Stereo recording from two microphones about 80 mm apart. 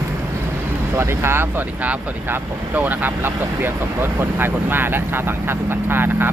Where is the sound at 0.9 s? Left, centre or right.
Right.